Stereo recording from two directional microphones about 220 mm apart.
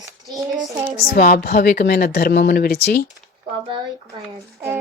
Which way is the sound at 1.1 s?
40° left (ahead or behind).